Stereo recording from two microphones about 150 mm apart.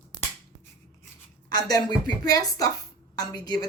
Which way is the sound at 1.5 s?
25° left (ahead or behind).